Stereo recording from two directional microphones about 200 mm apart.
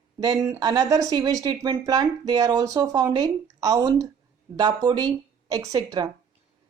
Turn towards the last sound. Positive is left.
turn(degrees=-15)  # may be behind; listen again after turning